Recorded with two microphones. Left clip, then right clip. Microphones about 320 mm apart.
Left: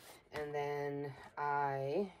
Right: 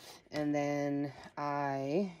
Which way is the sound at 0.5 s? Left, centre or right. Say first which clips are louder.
Right 5 dB; right.